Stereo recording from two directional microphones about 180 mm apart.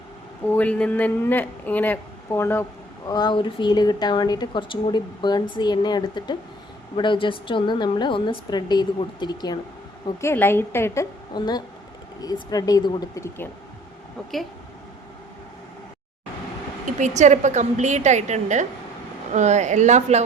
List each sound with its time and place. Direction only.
0.4 s speech: 10° left (ahead or behind)
3.1 s a woman's voice: 25° left (ahead or behind)
10.2 s a woman's voice: 15° left (ahead or behind)
16.8 s a woman's voice: 40° right (ahead or behind)